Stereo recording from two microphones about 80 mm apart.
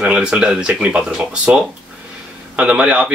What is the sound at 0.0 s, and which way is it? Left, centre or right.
A man's voice, centre.